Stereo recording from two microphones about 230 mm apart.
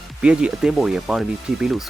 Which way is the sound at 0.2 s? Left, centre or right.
Centre.